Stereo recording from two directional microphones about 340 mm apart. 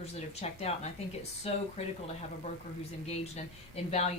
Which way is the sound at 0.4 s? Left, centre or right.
Centre.